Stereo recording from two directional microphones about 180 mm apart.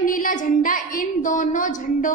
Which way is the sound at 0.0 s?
50° left (ahead or behind).